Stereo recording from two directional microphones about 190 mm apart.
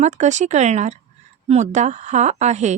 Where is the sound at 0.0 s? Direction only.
40° right (ahead or behind).